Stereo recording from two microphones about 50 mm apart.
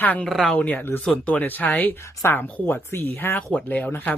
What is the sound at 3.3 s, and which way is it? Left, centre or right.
Speech, left.